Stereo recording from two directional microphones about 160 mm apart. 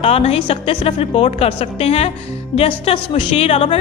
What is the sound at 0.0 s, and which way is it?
A woman's voice, 40° left (ahead or behind).